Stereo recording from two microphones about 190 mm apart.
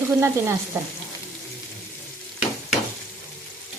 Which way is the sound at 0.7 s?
15° right (ahead or behind).